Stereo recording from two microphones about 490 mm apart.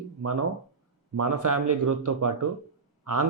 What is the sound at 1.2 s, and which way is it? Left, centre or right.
Speech, right.